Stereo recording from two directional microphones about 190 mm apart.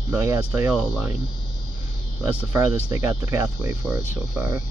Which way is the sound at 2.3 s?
15° right (ahead or behind).